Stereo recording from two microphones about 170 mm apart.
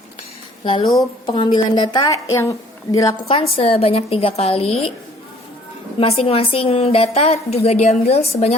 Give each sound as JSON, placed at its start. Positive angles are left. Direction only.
{"t": 0.6, "sound": "a woman's voice", "side_deg": 30}
{"t": 3.2, "sound": "a woman's voice", "side_deg": 35}
{"t": 6.0, "sound": "a woman's voice", "side_deg": 35}